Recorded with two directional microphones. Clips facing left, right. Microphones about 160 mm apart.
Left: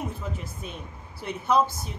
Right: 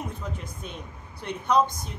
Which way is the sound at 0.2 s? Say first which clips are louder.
Left 1 dB; 5° left (ahead or behind).